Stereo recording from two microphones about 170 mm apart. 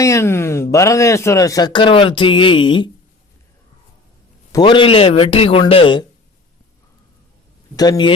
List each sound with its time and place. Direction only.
0.0 s speech: 15° left (ahead or behind)
4.5 s a man's voice: 30° left (ahead or behind)
7.8 s speech: 25° left (ahead or behind)